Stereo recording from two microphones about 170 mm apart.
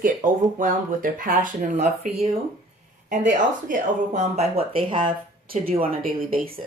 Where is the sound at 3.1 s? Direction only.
50° right (ahead or behind); by 5.0 s 30° right (ahead or behind).